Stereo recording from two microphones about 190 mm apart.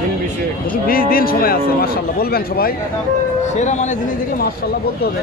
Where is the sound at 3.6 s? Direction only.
40° left (ahead or behind).